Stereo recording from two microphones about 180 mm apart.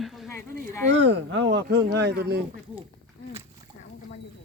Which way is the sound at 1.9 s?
65° right (ahead or behind).